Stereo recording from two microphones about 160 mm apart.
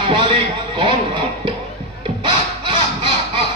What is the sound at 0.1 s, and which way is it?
Speech, 35° right (ahead or behind).